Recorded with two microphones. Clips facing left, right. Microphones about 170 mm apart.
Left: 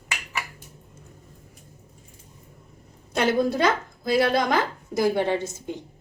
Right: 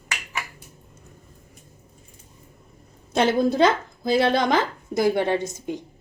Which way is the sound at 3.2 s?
25° right (ahead or behind).